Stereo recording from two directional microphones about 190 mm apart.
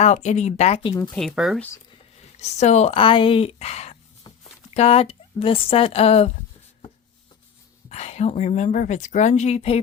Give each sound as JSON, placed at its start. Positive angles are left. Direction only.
{"t": 0.0, "sound": "speech", "side_deg": 35}
{"t": 1.1, "sound": "speech", "side_deg": 0}
{"t": 2.4, "sound": "speech", "side_deg": 35}
{"t": 7.9, "sound": "speech", "side_deg": 35}